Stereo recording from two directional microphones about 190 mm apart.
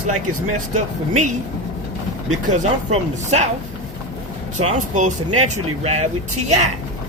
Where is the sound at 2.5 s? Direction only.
35° right (ahead or behind).